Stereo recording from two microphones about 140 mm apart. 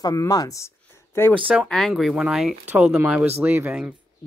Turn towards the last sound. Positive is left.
turn(degrees=-10)  # may be behind; listen again after turning